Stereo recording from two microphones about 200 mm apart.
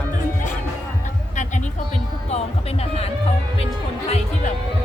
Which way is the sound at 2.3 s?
30° left (ahead or behind).